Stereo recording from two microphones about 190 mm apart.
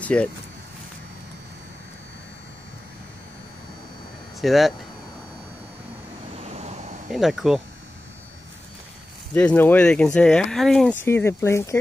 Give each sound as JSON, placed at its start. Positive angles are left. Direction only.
{"t": 0.0, "sound": "speech", "side_deg": 5}
{"t": 4.4, "sound": "speech", "side_deg": 0}
{"t": 6.4, "sound": "vehicle", "side_deg": -35}
{"t": 7.1, "sound": "speech", "side_deg": 0}
{"t": 9.3, "sound": "speech", "side_deg": 10}
{"t": 11.1, "sound": "speech", "side_deg": 15}